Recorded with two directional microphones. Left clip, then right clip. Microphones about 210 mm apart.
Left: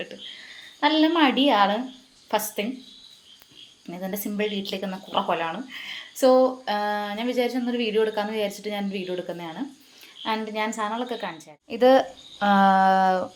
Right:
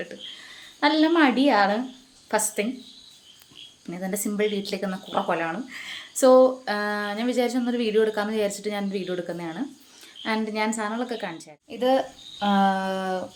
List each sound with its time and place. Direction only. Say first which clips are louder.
0.8 s speech: even; 15° right (ahead or behind)
3.8 s speech: right 2 dB; 15° right (ahead or behind)
11.7 s speech: left 5 dB; 10° left (ahead or behind)